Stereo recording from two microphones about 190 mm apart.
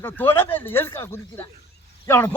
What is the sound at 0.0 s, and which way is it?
Speech, 10° left (ahead or behind).